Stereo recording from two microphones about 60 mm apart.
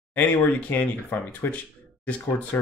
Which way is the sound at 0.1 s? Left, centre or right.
Left.